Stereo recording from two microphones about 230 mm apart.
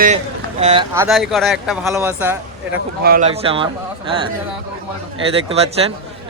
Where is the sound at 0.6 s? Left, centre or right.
Right.